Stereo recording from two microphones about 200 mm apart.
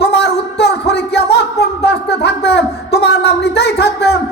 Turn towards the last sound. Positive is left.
turn(degrees=55)  # may be behind; listen again after turning